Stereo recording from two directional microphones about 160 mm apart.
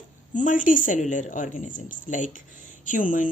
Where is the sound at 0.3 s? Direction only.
55° left (ahead or behind).